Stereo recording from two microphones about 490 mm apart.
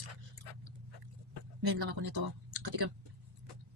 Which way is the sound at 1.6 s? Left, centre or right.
Right.